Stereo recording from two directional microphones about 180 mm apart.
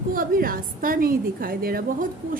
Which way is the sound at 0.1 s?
50° right (ahead or behind).